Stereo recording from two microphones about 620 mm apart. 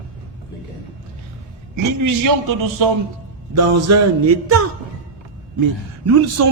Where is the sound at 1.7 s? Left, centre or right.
Right.